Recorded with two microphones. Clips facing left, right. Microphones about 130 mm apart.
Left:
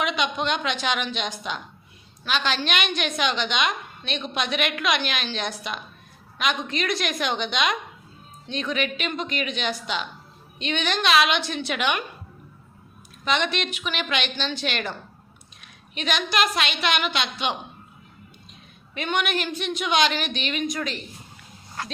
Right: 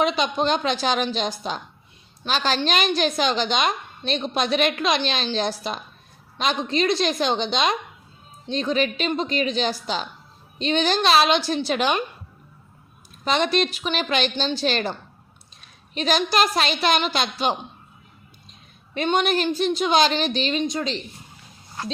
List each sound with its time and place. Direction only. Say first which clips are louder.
0.0 s a woman's voice: right 4 dB; 35° right (ahead or behind)
13.2 s a woman's voice: right 4 dB; 35° right (ahead or behind)
18.9 s a woman's voice: right 5 dB; 30° right (ahead or behind)